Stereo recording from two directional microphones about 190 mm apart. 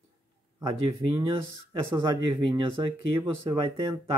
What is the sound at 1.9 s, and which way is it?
Speech, 25° right (ahead or behind).